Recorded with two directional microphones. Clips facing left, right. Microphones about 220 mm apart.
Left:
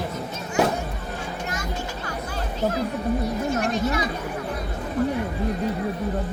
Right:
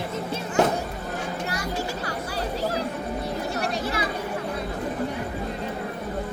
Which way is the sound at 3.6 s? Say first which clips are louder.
Left 3 dB; 35° right (ahead or behind).